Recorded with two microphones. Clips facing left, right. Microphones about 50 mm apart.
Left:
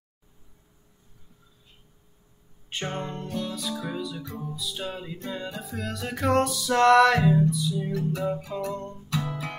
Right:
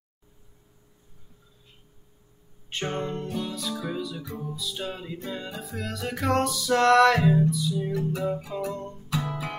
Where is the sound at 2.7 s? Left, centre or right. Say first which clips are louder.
Right 2 dB; centre.